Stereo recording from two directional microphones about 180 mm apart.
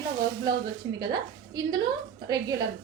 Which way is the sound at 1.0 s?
25° right (ahead or behind).